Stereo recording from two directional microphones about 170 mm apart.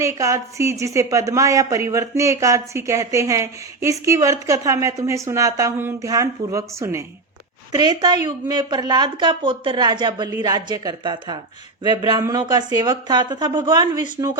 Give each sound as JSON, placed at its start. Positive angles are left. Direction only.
{"t": 0.0, "sound": "a woman's voice", "side_deg": -15}